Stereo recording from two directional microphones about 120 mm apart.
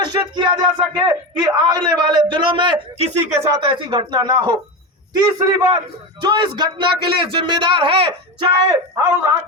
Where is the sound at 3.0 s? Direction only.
65° right (ahead or behind).